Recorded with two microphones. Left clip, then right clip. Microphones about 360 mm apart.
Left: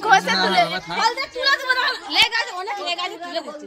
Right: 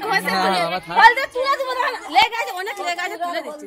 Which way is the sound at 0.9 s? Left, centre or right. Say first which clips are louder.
Right 10 dB; right.